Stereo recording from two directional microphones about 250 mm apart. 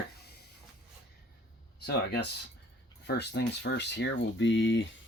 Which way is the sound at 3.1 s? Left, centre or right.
Left.